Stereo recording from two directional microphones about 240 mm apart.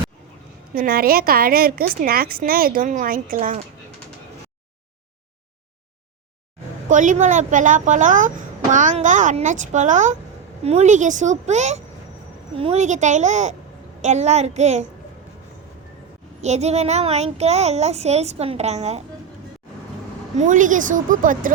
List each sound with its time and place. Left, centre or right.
0.7 s a woman's voice: right
6.8 s a woman's voice: right
16.4 s a child's voice: right
20.3 s a woman's voice: right